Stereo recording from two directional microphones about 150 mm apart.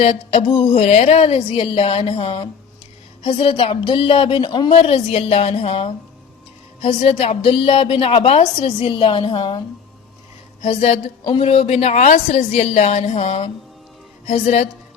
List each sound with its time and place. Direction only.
0.0 s a woman's voice: 45° left (ahead or behind)
10.6 s speech: 40° left (ahead or behind)